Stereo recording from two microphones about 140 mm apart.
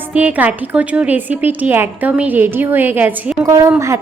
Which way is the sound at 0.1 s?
10° right (ahead or behind).